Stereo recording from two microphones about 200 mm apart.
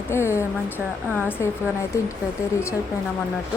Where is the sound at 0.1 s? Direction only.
15° left (ahead or behind).